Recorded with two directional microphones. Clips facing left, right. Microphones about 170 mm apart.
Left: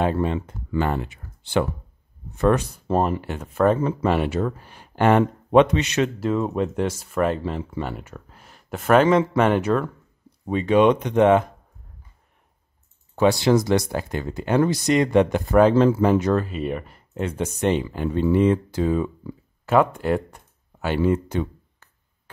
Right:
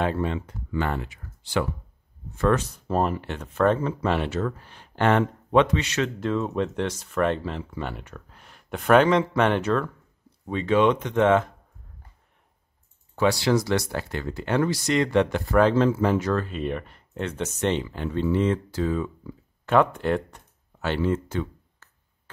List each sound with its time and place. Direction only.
0.2 s speech: 20° left (ahead or behind)
2.3 s speech: 15° left (ahead or behind)
13.1 s speech: 20° left (ahead or behind)
16.4 s speech: 5° left (ahead or behind)
19.6 s speech: 5° left (ahead or behind)